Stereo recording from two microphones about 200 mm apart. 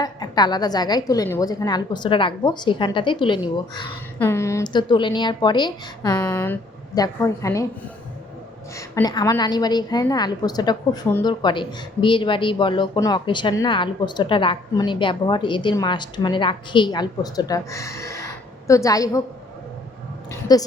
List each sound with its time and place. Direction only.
0.0 s a woman's voice: 20° left (ahead or behind)
4.2 s a woman's voice: 15° left (ahead or behind)
6.2 s speech: 10° left (ahead or behind)
8.7 s a woman's voice: 15° left (ahead or behind)
20.5 s a woman's voice: 20° left (ahead or behind)